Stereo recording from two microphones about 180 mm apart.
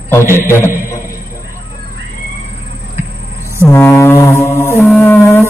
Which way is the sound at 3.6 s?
15° left (ahead or behind).